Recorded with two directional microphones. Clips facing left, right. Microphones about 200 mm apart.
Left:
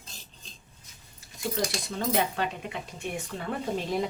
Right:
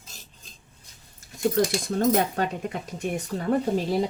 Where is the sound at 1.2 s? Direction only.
45° right (ahead or behind).